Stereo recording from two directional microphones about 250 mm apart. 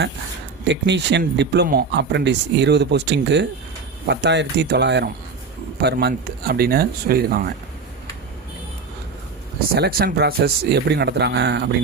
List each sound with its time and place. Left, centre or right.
0.6 s speech: right
9.7 s speech: right